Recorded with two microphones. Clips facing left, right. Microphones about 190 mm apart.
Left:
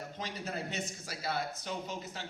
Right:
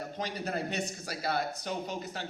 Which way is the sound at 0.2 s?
65° right (ahead or behind).